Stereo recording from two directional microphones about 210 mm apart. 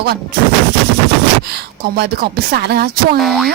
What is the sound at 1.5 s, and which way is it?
Speech, 50° right (ahead or behind).